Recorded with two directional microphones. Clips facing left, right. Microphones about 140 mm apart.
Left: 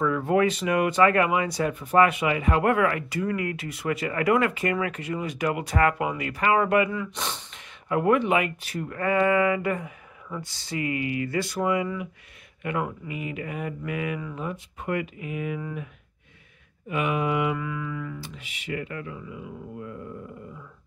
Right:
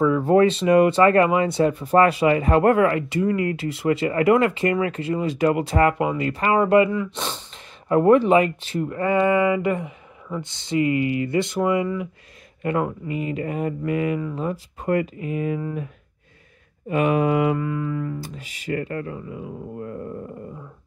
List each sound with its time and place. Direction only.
0.0 s speech: 30° right (ahead or behind)